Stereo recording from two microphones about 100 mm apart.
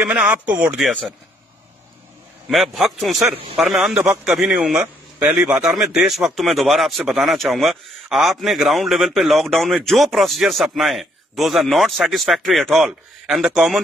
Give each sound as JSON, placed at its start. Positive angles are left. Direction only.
{"t": 0.0, "sound": "a man's voice", "side_deg": -15}
{"t": 2.5, "sound": "a man's voice", "side_deg": 0}